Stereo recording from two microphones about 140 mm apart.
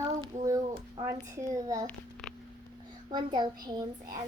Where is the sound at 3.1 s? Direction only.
30° right (ahead or behind).